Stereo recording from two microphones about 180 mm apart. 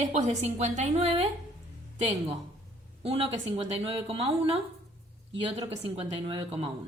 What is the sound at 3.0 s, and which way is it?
A woman's voice, 35° right (ahead or behind).